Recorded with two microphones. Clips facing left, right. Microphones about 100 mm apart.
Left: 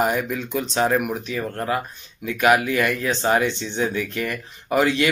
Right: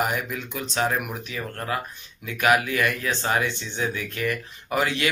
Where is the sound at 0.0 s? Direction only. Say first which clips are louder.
Left 5 dB; 20° left (ahead or behind).